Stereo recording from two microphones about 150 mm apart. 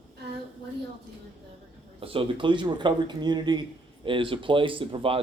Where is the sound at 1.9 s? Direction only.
35° right (ahead or behind).